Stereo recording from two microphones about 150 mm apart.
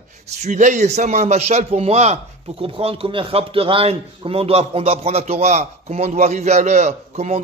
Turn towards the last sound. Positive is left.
turn(degrees=-50)  # may be behind; listen again after turning